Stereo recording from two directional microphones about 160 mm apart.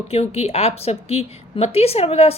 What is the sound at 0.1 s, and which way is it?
A woman's voice, 40° left (ahead or behind).